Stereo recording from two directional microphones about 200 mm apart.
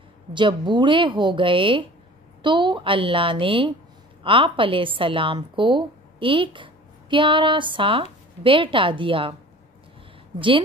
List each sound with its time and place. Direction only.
0.3 s a woman's voice: 25° right (ahead or behind)
10.3 s a woman's voice: 25° right (ahead or behind)